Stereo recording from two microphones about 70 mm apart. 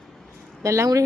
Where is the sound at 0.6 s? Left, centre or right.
Right.